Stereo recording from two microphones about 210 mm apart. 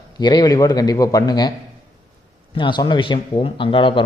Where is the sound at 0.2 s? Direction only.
20° left (ahead or behind).